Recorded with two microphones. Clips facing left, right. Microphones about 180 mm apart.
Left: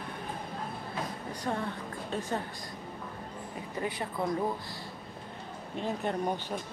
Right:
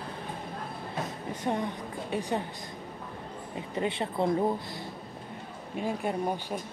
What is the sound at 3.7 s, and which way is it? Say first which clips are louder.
Speech: right 4 dB; 25° right (ahead or behind).